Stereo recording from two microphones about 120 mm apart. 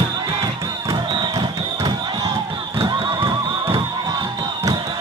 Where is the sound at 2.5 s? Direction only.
40° right (ahead or behind).